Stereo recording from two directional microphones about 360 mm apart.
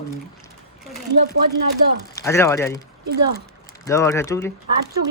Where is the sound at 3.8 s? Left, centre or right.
Centre.